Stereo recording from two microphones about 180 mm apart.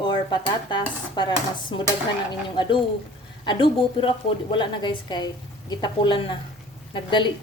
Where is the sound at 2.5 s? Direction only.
25° left (ahead or behind).